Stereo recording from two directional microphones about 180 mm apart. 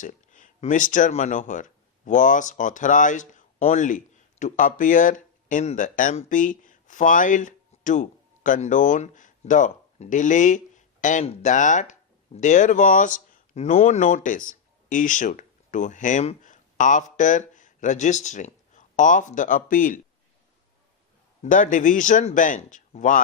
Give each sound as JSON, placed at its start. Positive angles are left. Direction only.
{"t": 0.0, "sound": "speech", "side_deg": 45}
{"t": 21.4, "sound": "speech", "side_deg": 45}